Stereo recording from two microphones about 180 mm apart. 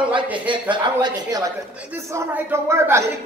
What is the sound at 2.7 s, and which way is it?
Speech, 15° right (ahead or behind).